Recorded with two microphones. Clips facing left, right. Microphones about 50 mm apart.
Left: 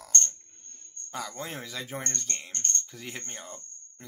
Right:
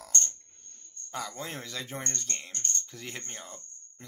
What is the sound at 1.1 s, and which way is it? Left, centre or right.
Speech, centre.